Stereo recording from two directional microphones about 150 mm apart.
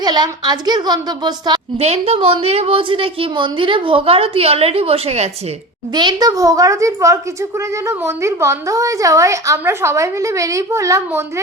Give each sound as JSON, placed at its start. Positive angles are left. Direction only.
{"t": 0.0, "sound": "a woman's voice", "side_deg": -25}
{"t": 1.8, "sound": "a woman's voice", "side_deg": -45}
{"t": 5.9, "sound": "a woman's voice", "side_deg": -30}